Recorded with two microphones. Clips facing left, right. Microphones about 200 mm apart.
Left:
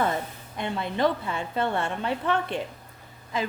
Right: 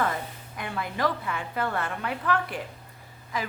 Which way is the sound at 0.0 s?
25° left (ahead or behind).